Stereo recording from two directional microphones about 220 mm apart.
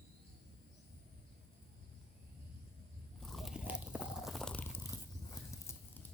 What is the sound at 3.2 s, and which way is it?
Biting, centre (ahead or behind).